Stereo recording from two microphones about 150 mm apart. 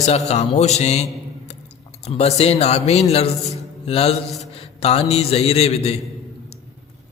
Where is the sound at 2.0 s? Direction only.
45° left (ahead or behind).